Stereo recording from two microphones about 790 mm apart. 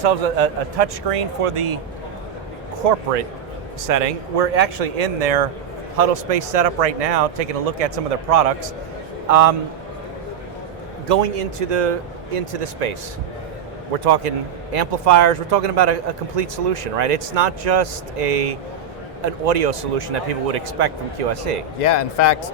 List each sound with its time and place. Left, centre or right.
0.0 s a man's voice: right
2.8 s a man's voice: right
3.8 s a man's voice: right
11.1 s speech: right
14.0 s speech: right
21.8 s speech: left